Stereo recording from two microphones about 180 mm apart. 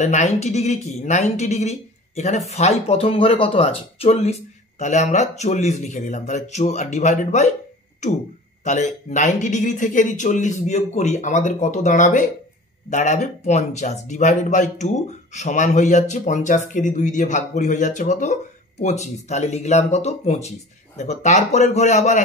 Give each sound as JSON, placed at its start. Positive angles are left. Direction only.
{"t": 0.0, "sound": "speech", "side_deg": 40}